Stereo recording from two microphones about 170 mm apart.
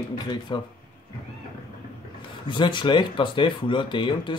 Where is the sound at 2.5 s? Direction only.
30° left (ahead or behind).